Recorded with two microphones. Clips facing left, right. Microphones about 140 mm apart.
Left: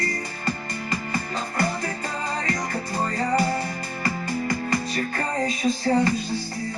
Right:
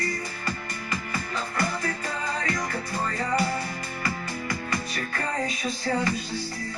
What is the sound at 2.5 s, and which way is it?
Music, 35° left (ahead or behind).